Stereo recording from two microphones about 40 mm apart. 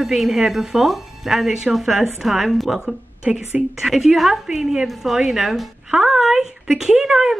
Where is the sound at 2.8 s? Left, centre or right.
Centre.